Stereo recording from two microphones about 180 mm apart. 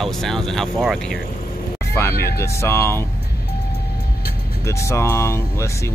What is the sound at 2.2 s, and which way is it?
Speech, 15° left (ahead or behind).